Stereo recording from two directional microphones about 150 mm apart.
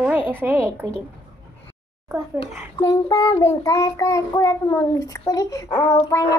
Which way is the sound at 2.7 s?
25° left (ahead or behind).